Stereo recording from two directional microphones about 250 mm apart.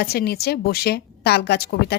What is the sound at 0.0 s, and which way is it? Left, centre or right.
A woman's voice, left.